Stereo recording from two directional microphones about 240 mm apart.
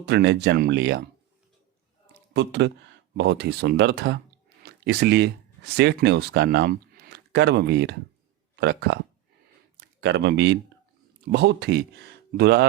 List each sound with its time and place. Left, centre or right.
0.0 s speech: right
2.3 s speech: right
10.0 s speech: right